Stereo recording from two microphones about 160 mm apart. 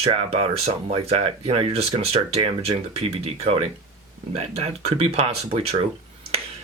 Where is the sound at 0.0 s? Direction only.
35° right (ahead or behind).